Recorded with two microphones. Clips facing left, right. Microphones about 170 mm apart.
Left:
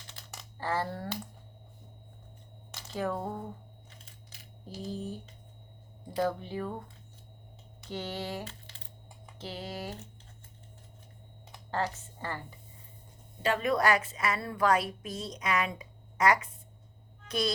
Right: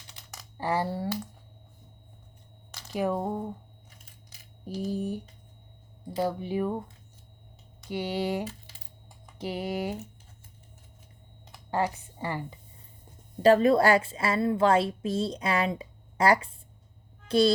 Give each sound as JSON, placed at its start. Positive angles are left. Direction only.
{"t": 0.6, "sound": "speech", "side_deg": -15}
{"t": 2.9, "sound": "speech", "side_deg": -15}
{"t": 7.9, "sound": "speech", "side_deg": -15}
{"t": 11.7, "sound": "speech", "side_deg": -15}
{"t": 13.4, "sound": "a woman's voice", "side_deg": -35}
{"t": 17.2, "sound": "a sound", "side_deg": -30}